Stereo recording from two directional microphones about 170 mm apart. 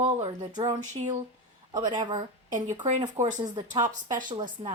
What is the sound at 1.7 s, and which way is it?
Speech, 25° right (ahead or behind).